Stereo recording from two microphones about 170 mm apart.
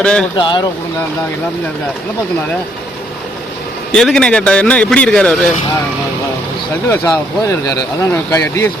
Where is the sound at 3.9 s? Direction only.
5° left (ahead or behind).